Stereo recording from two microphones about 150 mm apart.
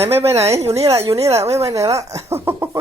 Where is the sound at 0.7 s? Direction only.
20° right (ahead or behind).